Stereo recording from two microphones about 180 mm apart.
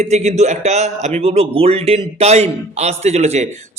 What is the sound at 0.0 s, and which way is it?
A man's voice, 40° right (ahead or behind).